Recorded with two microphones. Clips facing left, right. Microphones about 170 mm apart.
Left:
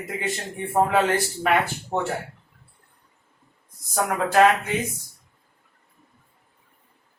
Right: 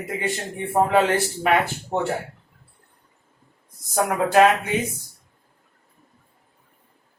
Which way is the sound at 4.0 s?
20° right (ahead or behind).